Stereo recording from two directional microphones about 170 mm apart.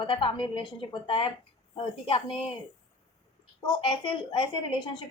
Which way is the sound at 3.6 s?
30° left (ahead or behind).